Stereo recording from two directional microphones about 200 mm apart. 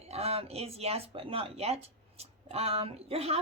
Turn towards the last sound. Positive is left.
turn(degrees=-30)  # may be behind; listen again after turning